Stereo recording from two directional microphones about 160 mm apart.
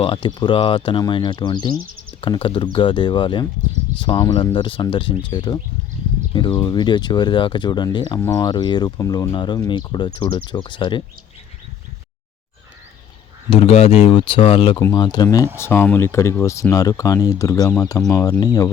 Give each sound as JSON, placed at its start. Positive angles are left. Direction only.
{"t": 0.0, "sound": "speech", "side_deg": 30}
{"t": 13.5, "sound": "speech", "side_deg": 40}